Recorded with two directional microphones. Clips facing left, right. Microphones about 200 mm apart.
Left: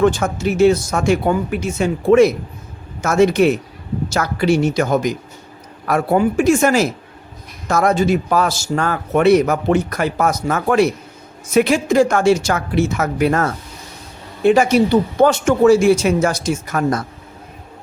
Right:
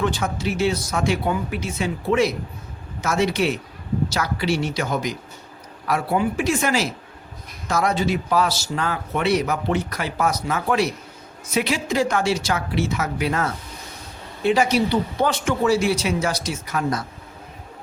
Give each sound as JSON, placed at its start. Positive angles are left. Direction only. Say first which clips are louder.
{"t": 0.0, "sound": "a man's voice", "louder": "left 8 dB", "side_deg": 45}